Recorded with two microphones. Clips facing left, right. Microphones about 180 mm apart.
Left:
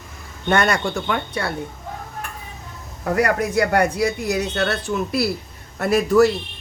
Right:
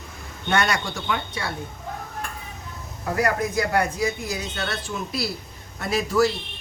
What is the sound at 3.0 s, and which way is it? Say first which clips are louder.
Speech: left 4 dB; 65° left (ahead or behind).